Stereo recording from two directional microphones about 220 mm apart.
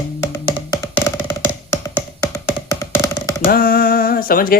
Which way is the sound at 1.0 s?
10° left (ahead or behind).